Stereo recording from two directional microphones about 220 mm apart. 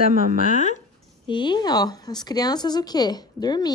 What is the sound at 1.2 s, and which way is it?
Speech, 20° left (ahead or behind).